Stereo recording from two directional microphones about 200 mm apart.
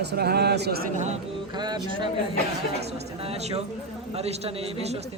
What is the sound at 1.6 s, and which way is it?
Speech, 20° right (ahead or behind).